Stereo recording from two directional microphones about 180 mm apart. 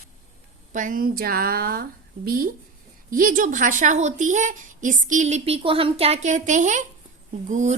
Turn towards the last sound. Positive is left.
turn(degrees=-40)  # may be behind; listen again after turning